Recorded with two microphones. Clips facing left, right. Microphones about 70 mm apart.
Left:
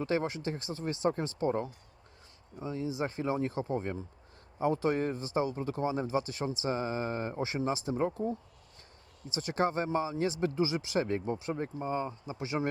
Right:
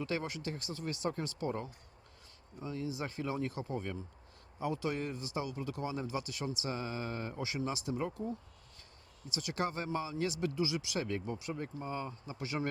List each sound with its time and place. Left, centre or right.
0.0 s a man's voice: left